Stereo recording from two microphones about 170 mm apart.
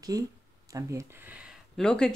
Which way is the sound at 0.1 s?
20° right (ahead or behind).